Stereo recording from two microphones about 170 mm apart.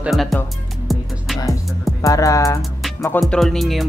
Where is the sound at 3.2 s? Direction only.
Centre (ahead or behind).